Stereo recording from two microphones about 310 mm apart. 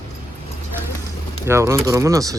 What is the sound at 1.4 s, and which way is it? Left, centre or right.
Speech, centre.